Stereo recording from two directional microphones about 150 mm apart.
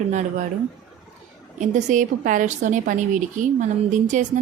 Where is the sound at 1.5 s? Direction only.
55° right (ahead or behind).